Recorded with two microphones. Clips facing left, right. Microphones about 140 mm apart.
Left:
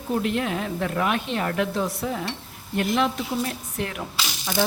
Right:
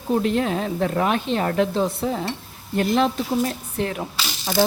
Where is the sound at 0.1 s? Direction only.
35° right (ahead or behind).